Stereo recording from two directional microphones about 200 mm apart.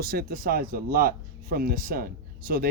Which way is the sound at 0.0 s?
50° right (ahead or behind).